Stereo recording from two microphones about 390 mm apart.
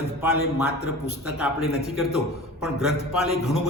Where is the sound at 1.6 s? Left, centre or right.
Left.